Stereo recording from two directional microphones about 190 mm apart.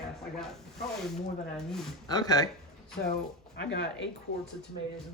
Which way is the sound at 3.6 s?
70° left (ahead or behind).